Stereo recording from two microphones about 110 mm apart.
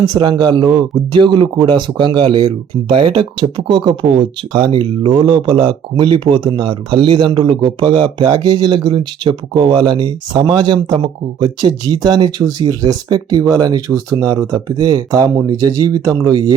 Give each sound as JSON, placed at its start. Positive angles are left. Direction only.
{"t": 0.1, "sound": "speech", "side_deg": -40}